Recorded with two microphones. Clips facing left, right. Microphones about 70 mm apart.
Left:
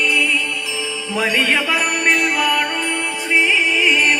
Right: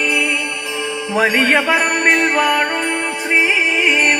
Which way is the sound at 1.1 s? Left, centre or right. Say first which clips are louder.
Right 4 dB; right.